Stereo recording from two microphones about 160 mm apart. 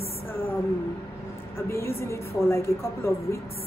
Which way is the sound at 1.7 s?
15° left (ahead or behind).